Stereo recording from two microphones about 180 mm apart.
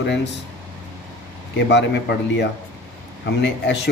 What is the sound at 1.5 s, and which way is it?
A man's voice, 75° left (ahead or behind).